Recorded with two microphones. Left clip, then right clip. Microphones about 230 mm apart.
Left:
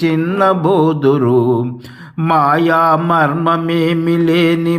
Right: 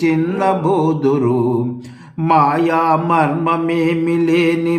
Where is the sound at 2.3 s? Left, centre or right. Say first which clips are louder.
Left 2 dB; centre.